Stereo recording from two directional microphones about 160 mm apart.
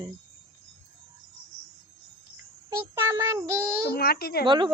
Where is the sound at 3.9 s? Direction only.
70° left (ahead or behind).